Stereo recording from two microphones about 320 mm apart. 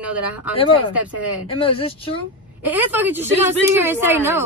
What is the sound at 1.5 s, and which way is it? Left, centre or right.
Speech, centre.